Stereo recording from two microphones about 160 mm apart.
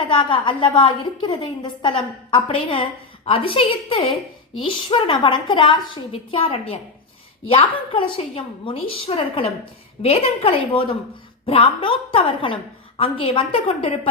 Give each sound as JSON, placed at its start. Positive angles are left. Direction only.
{"t": 0.1, "sound": "a woman's voice", "side_deg": 30}